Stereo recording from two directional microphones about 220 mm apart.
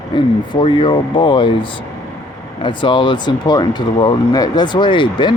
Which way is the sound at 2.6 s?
20° left (ahead or behind).